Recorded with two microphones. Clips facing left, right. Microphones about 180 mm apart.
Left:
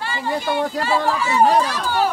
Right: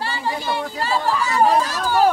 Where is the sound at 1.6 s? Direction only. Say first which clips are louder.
Right 3 dB; 45° right (ahead or behind).